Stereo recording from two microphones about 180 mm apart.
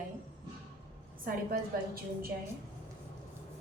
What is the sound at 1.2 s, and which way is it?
A woman's voice, 55° right (ahead or behind).